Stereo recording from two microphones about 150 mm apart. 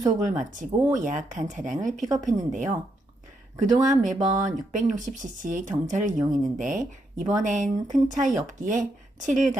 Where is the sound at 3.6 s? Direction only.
25° right (ahead or behind).